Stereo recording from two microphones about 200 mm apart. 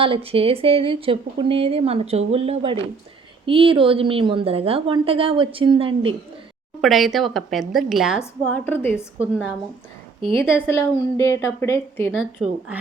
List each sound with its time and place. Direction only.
0.0 s a woman's voice: 25° right (ahead or behind)
6.8 s a woman's voice: centre (ahead or behind)
8.2 s a woman's voice: 10° left (ahead or behind)
10.7 s a woman's voice: 15° left (ahead or behind)
12.1 s a woman's voice: 5° right (ahead or behind)